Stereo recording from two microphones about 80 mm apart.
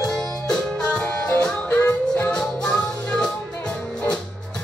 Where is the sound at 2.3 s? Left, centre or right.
Centre.